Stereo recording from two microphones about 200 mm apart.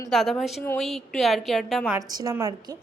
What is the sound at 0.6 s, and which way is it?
A woman's voice, 10° left (ahead or behind).